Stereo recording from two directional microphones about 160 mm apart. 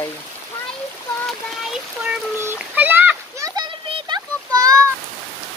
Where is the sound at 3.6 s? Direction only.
30° right (ahead or behind).